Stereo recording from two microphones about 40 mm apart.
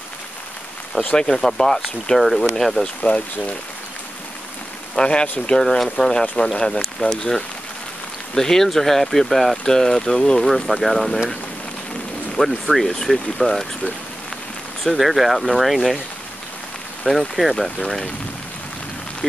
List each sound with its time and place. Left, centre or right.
1.1 s speech: centre
3.0 s speech: left
4.9 s speech: left
8.4 s speech: centre
12.4 s speech: centre
14.9 s speech: centre
17.1 s speech: centre
17.4 s speech: centre
17.8 s speech: centre